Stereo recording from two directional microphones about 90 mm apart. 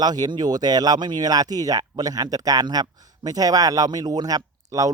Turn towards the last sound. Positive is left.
turn(degrees=-40)  # may be behind; listen again after turning